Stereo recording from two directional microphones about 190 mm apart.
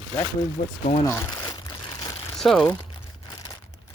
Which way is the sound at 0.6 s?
40° left (ahead or behind).